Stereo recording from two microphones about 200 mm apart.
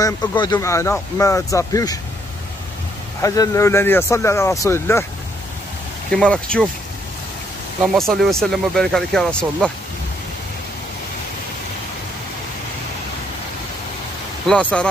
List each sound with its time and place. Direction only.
0.0 s speech: 20° left (ahead or behind)
3.2 s speech: 15° left (ahead or behind)
6.1 s speech: 5° left (ahead or behind)
7.8 s speech: centre (ahead or behind)
14.5 s speech: 5° left (ahead or behind)